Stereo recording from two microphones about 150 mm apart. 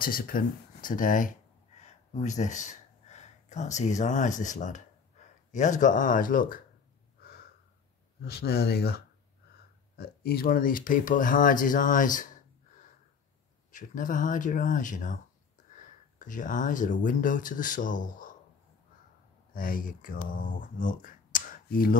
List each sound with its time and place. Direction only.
0.0 s speech: 70° left (ahead or behind)
1.8 s speech: 50° left (ahead or behind)
8.2 s speech: 90° left; by 12.3 s 60° left (ahead or behind)
13.7 s speech: 60° left (ahead or behind)
19.5 s speech: 70° left (ahead or behind)